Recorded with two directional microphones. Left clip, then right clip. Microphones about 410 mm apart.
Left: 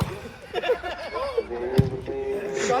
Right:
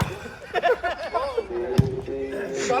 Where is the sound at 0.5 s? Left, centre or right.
Centre.